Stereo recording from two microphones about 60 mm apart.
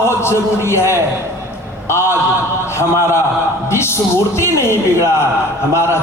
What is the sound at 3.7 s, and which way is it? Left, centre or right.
A man's voice, left.